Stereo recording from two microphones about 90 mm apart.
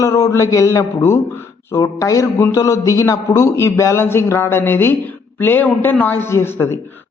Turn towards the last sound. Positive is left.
turn(degrees=30)  # may be behind; listen again after turning